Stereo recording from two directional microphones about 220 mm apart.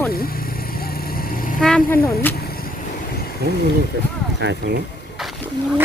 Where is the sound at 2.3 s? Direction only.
45° left (ahead or behind).